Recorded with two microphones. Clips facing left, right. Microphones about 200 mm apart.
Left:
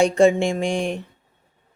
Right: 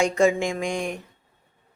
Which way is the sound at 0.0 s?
30° left (ahead or behind).